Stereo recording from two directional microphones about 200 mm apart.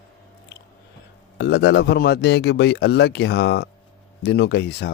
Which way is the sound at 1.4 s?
60° left (ahead or behind).